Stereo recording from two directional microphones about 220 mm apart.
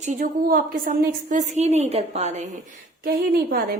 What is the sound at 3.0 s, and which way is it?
Speech, 40° right (ahead or behind).